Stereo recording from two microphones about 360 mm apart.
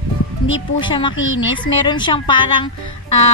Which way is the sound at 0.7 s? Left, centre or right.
Centre.